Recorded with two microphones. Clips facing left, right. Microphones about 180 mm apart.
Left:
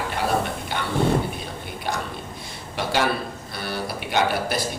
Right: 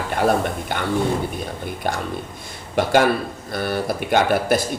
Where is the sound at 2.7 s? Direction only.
50° right (ahead or behind).